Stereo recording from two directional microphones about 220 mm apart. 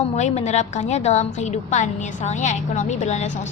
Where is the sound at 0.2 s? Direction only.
30° left (ahead or behind).